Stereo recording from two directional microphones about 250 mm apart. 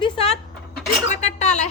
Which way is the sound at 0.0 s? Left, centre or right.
Left.